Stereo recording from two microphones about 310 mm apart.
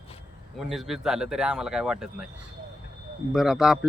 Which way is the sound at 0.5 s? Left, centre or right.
Centre.